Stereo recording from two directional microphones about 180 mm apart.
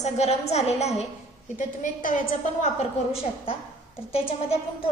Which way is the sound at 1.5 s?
50° left (ahead or behind).